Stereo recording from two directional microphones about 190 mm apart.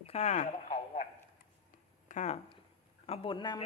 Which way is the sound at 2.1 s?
40° left (ahead or behind).